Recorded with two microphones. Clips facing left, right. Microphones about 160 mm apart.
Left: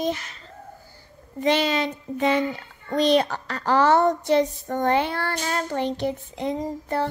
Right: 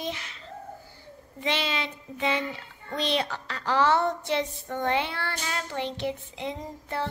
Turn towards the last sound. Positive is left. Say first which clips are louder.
# left 8 dB
turn(degrees=40)  # may be behind; listen again after turning